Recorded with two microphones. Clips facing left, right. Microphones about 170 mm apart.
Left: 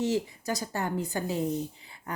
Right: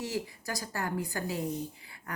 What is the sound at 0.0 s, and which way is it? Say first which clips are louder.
Speech: left 7 dB; 25° left (ahead or behind).